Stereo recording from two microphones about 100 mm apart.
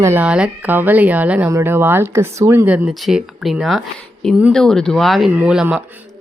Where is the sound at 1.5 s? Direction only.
25° right (ahead or behind).